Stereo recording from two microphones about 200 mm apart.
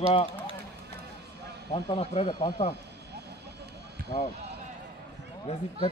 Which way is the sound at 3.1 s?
55° right (ahead or behind).